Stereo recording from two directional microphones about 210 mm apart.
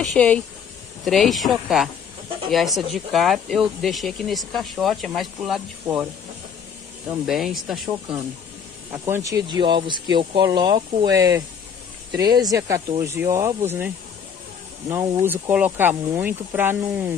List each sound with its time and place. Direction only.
0.0 s speech: 5° left (ahead or behind)
7.2 s speech: centre (ahead or behind)
8.9 s speech: 15° right (ahead or behind)